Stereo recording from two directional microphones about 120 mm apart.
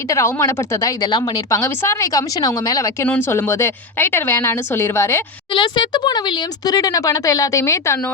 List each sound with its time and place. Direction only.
0.1 s a woman's voice: 25° left (ahead or behind)
5.5 s speech: 40° left (ahead or behind); by 7.9 s 25° left (ahead or behind)